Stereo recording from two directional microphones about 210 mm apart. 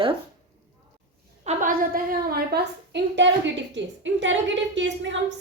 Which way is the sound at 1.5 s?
40° right (ahead or behind).